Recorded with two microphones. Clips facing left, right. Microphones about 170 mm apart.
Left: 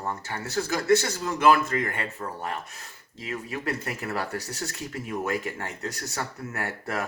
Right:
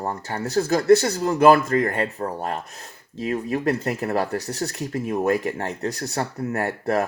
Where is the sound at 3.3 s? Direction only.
35° right (ahead or behind).